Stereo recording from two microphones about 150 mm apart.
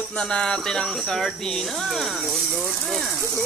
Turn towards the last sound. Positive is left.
turn(degrees=0)  # may be behind; listen again after turning